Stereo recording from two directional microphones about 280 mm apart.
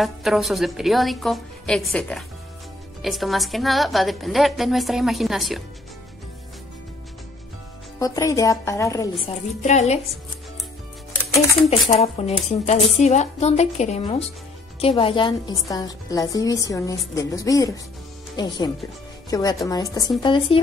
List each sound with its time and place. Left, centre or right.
0.0 s a woman's voice: centre
8.0 s a woman's voice: centre
9.6 s speech: left
11.9 s a woman's voice: left